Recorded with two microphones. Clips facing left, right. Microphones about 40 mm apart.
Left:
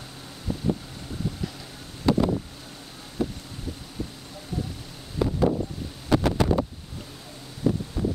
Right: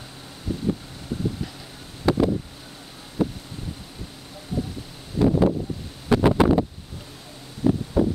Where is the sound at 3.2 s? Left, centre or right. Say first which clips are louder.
Right 4 dB; centre.